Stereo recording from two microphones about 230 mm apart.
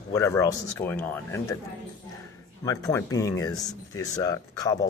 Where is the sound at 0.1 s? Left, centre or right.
Centre.